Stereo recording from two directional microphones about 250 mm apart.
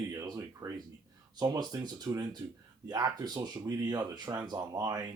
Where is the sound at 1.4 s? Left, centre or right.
Centre.